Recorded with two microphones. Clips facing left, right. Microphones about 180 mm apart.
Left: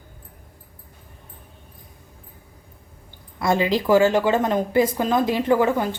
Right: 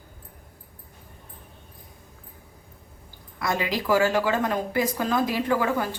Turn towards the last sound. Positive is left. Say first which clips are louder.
# left 5 dB
turn(degrees=20)  # may be behind; listen again after turning